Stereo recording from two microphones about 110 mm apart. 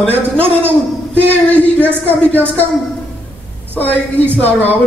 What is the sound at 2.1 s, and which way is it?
Speech, 15° left (ahead or behind).